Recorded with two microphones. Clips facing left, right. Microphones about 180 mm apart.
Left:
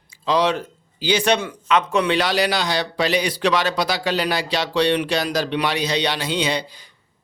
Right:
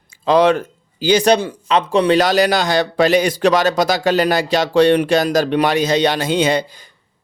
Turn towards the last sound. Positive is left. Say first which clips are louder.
# right 7 dB
turn(degrees=-50)  # may be behind; listen again after turning